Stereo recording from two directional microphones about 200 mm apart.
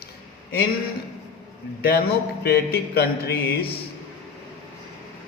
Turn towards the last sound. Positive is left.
turn(degrees=50)  # may be behind; listen again after turning